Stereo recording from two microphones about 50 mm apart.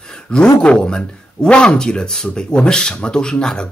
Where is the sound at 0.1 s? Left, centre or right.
Centre.